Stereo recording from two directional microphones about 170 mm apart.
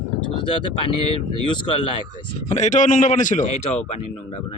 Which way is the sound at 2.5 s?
45° left (ahead or behind).